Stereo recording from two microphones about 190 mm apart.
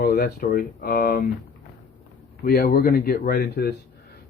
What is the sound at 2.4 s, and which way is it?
Speech, 50° left (ahead or behind).